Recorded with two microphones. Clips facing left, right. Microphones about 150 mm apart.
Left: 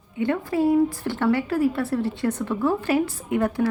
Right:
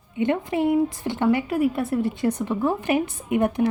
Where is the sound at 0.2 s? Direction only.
20° right (ahead or behind).